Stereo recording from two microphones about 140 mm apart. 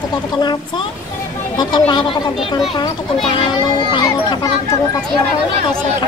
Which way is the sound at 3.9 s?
30° left (ahead or behind).